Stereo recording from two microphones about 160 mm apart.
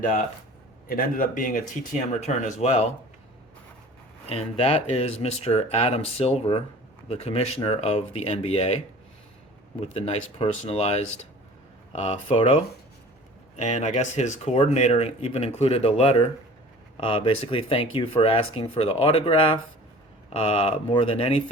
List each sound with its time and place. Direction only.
0.9 s speech: 60° left (ahead or behind); by 2.9 s 45° left (ahead or behind)
4.3 s speech: 40° left (ahead or behind)
9.8 s speech: 40° left (ahead or behind)
13.6 s speech: 45° left (ahead or behind)